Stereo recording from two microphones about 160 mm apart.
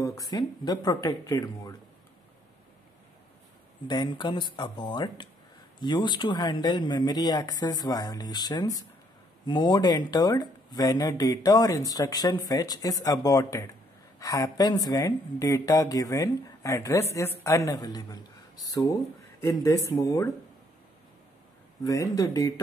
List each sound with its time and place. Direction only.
0.0 s speech: 20° left (ahead or behind)
3.8 s speech: 25° left (ahead or behind)
21.8 s speech: 20° left (ahead or behind)